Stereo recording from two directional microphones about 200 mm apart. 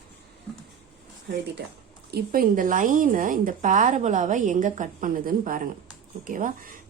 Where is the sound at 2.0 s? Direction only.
50° right (ahead or behind).